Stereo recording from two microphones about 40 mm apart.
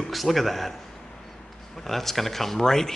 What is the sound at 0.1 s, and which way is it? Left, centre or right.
Speech, centre.